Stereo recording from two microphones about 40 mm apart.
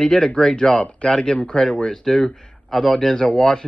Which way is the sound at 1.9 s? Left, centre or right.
Centre.